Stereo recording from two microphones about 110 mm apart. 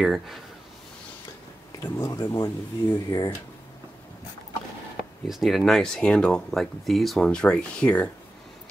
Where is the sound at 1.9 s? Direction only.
30° left (ahead or behind).